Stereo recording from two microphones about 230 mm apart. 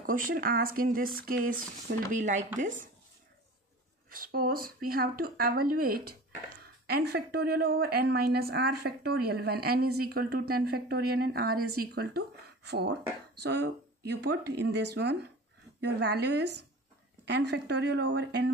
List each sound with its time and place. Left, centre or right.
0.0 s speech: right
4.1 s speech: right